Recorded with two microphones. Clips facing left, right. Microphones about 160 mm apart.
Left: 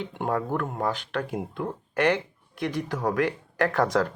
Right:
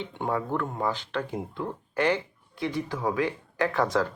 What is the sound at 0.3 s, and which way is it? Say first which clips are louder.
Speech: left 1 dB; 65° left (ahead or behind).